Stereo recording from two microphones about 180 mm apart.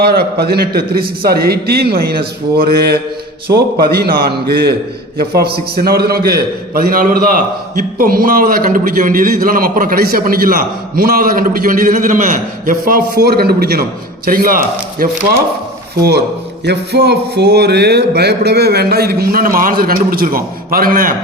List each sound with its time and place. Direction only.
0.0 s a man's voice: 60° right (ahead or behind)
16.6 s a man's voice: 65° right (ahead or behind)